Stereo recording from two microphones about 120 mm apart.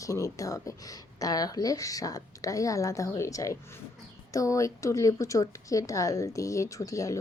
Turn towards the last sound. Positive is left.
turn(degrees=25)  # may be behind; listen again after turning